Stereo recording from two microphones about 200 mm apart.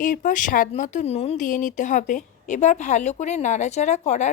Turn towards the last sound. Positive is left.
turn(degrees=35)  # may be behind; listen again after turning